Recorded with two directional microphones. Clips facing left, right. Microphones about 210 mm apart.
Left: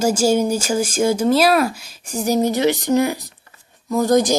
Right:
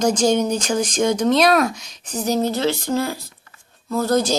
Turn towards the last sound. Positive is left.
turn(degrees=15)  # may be behind; listen again after turning